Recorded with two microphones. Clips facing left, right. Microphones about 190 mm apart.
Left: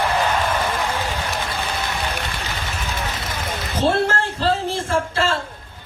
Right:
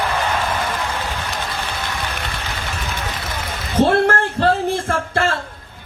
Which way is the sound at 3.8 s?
55° right (ahead or behind).